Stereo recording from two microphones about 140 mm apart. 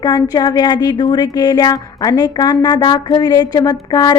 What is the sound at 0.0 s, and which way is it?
Speech, 25° left (ahead or behind).